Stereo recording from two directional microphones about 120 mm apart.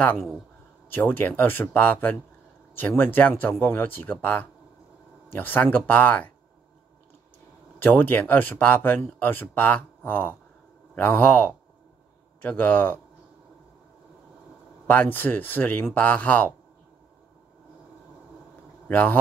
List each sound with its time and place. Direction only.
0.8 s speech: 15° left (ahead or behind)
7.8 s speech: 15° left (ahead or behind)
14.9 s speech: 15° left (ahead or behind)
18.9 s speech: 15° left (ahead or behind)